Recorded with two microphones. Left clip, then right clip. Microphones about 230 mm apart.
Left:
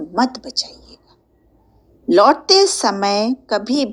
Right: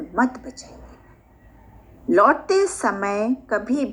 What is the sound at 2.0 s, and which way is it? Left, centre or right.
A woman's voice, left.